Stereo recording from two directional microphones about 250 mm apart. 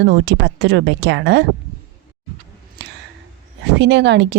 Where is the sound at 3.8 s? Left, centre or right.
Right.